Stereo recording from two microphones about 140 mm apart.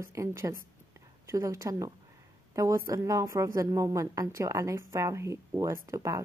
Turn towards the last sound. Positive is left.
turn(degrees=-25)  # may be behind; listen again after turning